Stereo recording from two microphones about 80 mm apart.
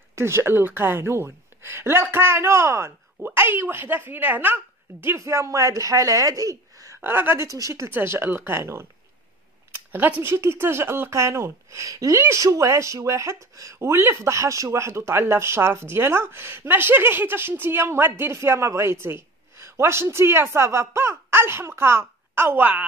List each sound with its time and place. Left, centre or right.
0.1 s speech: right
3.2 s speech: right
5.0 s speech: right
7.1 s speech: right
7.4 s speech: right
7.9 s speech: right
10.3 s speech: right